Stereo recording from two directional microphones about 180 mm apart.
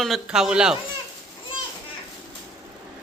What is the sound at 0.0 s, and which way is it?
Speech, centre (ahead or behind).